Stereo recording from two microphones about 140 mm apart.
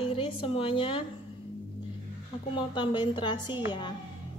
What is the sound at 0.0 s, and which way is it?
A woman's voice, 40° left (ahead or behind).